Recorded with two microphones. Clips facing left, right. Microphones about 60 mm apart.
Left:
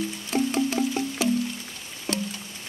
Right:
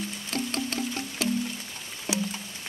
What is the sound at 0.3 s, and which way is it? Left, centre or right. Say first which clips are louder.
Music: left 7 dB; centre.